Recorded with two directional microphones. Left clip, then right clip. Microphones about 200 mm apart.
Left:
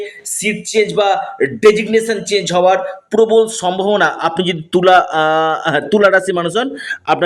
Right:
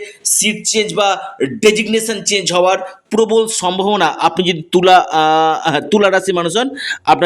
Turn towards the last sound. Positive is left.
turn(degrees=-20)  # may be behind; listen again after turning